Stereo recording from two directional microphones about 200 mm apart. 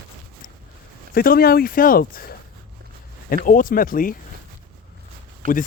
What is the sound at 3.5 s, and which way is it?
Speech, 40° left (ahead or behind).